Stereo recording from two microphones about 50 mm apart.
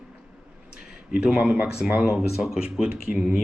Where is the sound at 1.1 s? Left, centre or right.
Right.